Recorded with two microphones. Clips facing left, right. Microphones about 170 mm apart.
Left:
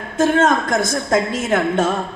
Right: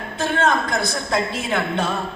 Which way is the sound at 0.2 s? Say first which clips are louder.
Left 5 dB; 45° left (ahead or behind).